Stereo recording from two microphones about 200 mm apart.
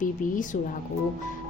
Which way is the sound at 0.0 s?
40° left (ahead or behind).